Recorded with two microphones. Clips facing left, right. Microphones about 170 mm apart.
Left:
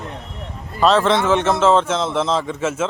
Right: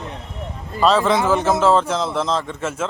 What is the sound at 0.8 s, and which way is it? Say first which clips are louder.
A man's voice: left 1 dB; centre (ahead or behind).